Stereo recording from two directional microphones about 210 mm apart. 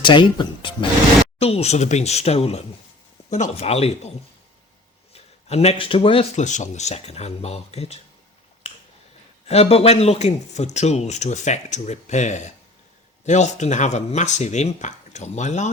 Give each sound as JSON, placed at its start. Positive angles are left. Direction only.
{"t": 0.0, "sound": "speech", "side_deg": 20}
{"t": 5.1, "sound": "a sound", "side_deg": 30}
{"t": 5.8, "sound": "speech", "side_deg": 25}
{"t": 8.7, "sound": "finger snapping", "side_deg": 30}
{"t": 9.5, "sound": "speech", "side_deg": 30}